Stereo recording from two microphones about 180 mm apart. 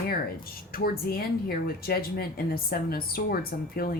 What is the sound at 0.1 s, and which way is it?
Speech, 55° left (ahead or behind).